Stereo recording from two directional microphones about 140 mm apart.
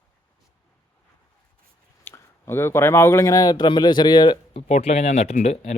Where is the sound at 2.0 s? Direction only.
15° left (ahead or behind); by 4.6 s 30° left (ahead or behind).